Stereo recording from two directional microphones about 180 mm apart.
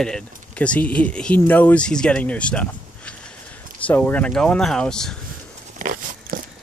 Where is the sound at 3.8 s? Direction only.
10° left (ahead or behind).